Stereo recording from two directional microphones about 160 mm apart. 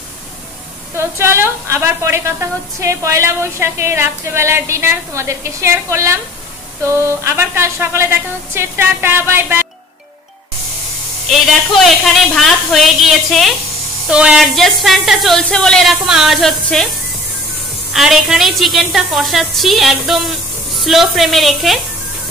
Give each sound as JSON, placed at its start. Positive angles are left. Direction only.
{"t": 0.9, "sound": "a woman's voice", "side_deg": -15}
{"t": 11.4, "sound": "speech", "side_deg": 0}
{"t": 17.9, "sound": "speech", "side_deg": 0}